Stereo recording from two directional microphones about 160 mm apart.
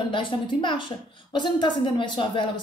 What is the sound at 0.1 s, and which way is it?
A woman's voice, 30° left (ahead or behind).